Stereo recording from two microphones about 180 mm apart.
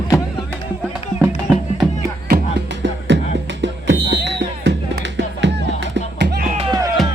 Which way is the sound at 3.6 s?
75° right (ahead or behind).